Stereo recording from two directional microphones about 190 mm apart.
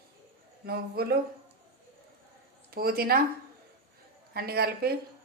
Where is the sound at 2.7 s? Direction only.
55° right (ahead or behind).